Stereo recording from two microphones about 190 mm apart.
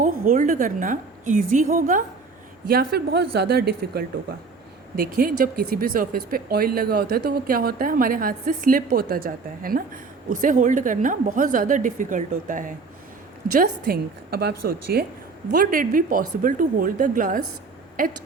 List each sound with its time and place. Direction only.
0.0 s speech: 45° right (ahead or behind)
2.6 s a woman's voice: 55° right (ahead or behind)